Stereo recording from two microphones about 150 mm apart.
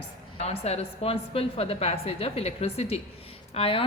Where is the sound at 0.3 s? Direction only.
45° left (ahead or behind).